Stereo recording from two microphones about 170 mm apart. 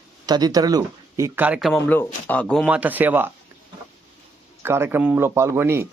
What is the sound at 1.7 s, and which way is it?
Speech, 10° left (ahead or behind).